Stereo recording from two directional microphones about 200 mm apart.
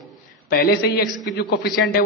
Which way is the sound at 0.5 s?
50° left (ahead or behind).